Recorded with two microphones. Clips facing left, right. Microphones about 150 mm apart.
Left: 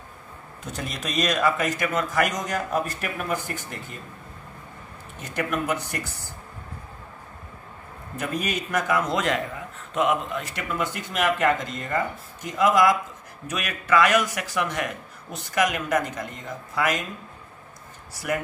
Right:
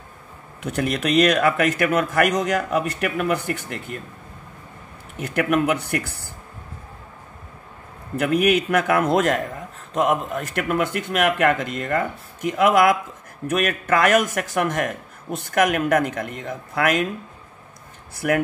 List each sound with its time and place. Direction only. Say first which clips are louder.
0.6 s a man's voice: right 10 dB; 65° right (ahead or behind)
5.2 s a man's voice: right 7 dB; 65° right (ahead or behind)
8.2 s a man's voice: right 10 dB; 65° right (ahead or behind)
13.5 s a man's voice: right 4 dB; 50° right (ahead or behind)
18.1 s a man's voice: right 6 dB; 55° right (ahead or behind)